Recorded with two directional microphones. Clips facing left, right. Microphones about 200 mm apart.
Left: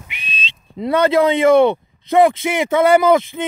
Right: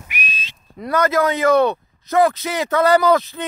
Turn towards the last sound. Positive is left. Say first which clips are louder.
# left 3 dB
turn(degrees=20)  # may be behind; listen again after turning